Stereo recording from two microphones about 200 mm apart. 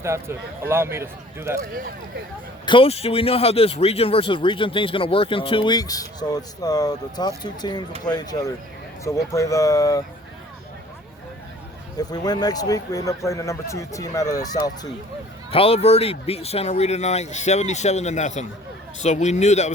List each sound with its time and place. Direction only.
0.0 s speech: 15° right (ahead or behind)
1.7 s speech: 45° right (ahead or behind)
2.6 s a man's voice: 25° left (ahead or behind)
11.9 s speech: 20° left (ahead or behind)
15.5 s speech: 30° left (ahead or behind)